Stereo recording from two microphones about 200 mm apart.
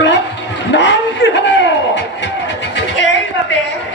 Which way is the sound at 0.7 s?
65° left (ahead or behind).